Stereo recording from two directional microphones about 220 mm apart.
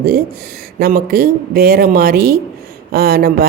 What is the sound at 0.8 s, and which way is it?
A woman's voice, 45° right (ahead or behind).